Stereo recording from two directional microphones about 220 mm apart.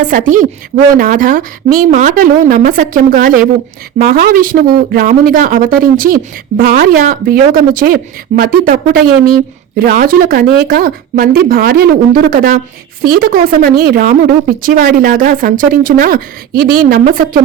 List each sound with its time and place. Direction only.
0.0 s a woman's voice: 35° right (ahead or behind)